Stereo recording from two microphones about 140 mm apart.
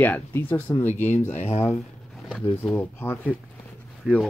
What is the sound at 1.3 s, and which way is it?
Speech, 60° left (ahead or behind).